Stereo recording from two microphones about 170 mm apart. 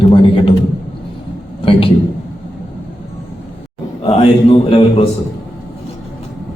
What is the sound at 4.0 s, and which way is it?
Speech, 35° left (ahead or behind).